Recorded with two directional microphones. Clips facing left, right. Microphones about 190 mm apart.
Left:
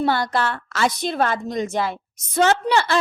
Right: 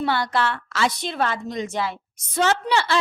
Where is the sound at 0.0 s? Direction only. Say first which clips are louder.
Left 2 dB; 40° left (ahead or behind).